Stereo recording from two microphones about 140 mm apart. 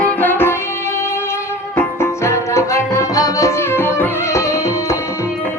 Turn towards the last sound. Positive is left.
turn(degrees=20)  # may be behind; listen again after turning